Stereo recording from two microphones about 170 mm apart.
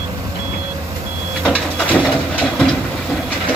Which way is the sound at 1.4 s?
5° left (ahead or behind).